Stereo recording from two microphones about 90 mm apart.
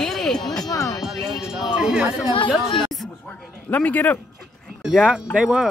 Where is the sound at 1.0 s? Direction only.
5° right (ahead or behind).